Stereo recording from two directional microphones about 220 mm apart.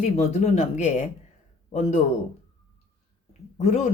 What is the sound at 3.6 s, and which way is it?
Speech, 30° left (ahead or behind).